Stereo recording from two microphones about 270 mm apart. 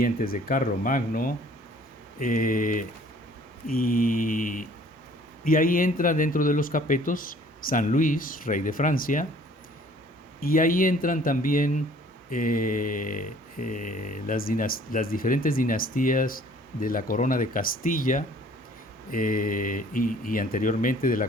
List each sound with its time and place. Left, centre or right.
0.0 s mantra: left
10.4 s mantra: left